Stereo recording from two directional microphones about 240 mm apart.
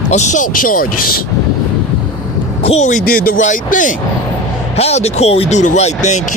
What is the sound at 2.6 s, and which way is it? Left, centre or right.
Speech, left.